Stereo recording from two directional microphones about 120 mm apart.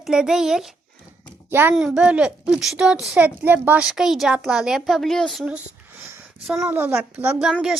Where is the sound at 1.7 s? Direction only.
5° right (ahead or behind).